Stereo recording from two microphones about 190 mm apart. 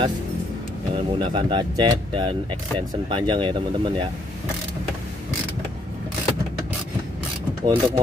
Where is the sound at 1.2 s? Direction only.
25° right (ahead or behind).